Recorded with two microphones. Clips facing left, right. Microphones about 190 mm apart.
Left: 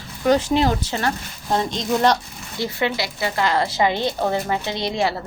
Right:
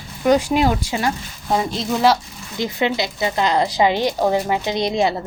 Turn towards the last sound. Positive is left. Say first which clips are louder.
# right 4 dB
turn(degrees=-20)  # may be behind; listen again after turning